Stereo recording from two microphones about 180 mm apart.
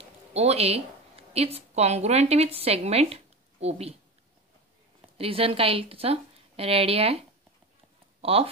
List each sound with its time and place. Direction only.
0.3 s a woman's voice: 35° right (ahead or behind)
5.1 s a woman's voice: 30° right (ahead or behind)